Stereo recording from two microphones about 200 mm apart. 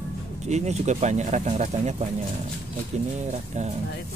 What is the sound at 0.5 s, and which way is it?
Speech, 35° right (ahead or behind).